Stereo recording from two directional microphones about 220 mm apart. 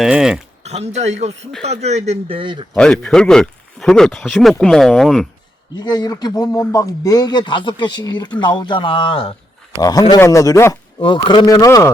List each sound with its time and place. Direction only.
0.0 s speech: 5° right (ahead or behind)
0.6 s a man's voice: 30° right (ahead or behind)
2.7 s speech: 5° left (ahead or behind)
5.7 s a man's voice: 20° left (ahead or behind)